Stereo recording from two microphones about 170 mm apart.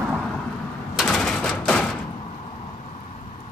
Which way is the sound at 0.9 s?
Centre (ahead or behind).